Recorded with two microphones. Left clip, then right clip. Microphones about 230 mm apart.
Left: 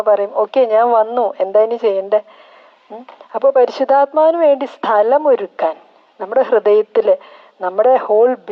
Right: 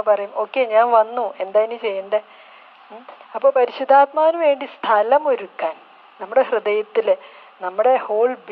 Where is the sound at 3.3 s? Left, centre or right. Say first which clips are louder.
Left 4 dB; left.